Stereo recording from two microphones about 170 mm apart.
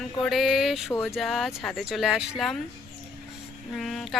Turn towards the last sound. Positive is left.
turn(degrees=0)  # may be behind; listen again after turning